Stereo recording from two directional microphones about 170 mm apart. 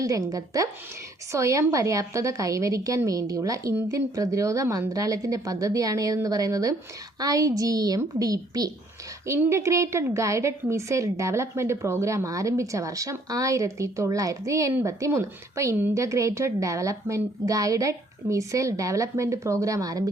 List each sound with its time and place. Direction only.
0.0 s a woman's voice: 20° right (ahead or behind)